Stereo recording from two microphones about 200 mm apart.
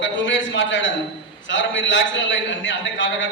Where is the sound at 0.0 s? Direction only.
70° left (ahead or behind).